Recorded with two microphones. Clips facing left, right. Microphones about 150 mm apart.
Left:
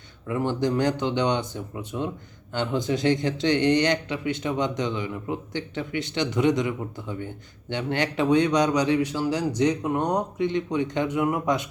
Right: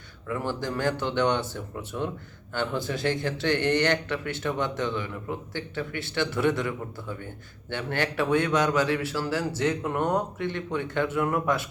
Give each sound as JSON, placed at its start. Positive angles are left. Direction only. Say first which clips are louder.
{"t": 0.3, "sound": "speech", "louder": "left 5 dB", "side_deg": 20}